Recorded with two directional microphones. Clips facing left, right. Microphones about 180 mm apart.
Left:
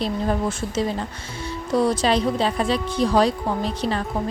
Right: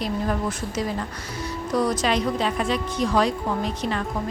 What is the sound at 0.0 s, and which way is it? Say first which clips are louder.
A woman's voice: left 2 dB; 30° left (ahead or behind).